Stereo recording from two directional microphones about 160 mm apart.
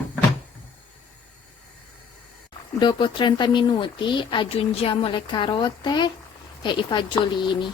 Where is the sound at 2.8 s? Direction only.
30° left (ahead or behind).